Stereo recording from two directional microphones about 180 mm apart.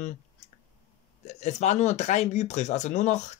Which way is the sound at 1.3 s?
40° left (ahead or behind).